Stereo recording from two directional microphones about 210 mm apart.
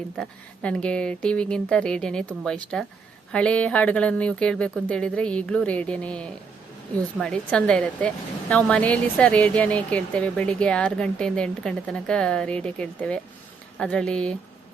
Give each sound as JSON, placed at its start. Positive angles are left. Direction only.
{"t": 0.2, "sound": "a woman's voice", "side_deg": 5}